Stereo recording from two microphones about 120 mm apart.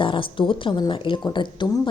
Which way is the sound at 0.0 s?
45° left (ahead or behind).